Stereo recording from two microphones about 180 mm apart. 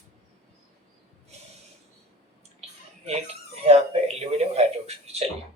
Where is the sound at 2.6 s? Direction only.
35° right (ahead or behind).